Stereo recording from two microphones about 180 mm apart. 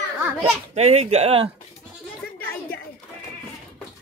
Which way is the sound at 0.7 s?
35° right (ahead or behind).